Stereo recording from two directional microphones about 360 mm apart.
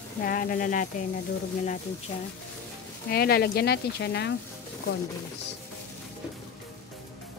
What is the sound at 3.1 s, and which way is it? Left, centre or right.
Speech, left.